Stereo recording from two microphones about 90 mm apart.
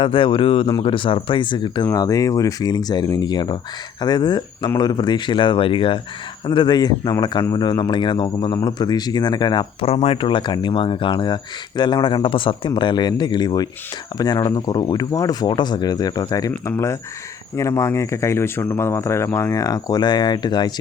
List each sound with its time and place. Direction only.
0.0 s speech: 70° left (ahead or behind)
6.4 s speech: 60° left (ahead or behind)
9.8 s speech: 90° left; by 15.4 s 40° left (ahead or behind)
15.4 s speech: 55° left (ahead or behind)
16.6 s speech: 30° left (ahead or behind); by 20.7 s 55° left (ahead or behind)